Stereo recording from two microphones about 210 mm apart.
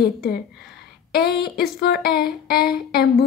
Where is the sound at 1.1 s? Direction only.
50° left (ahead or behind).